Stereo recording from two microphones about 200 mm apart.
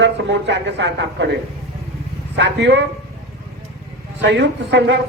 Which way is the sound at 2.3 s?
60° right (ahead or behind).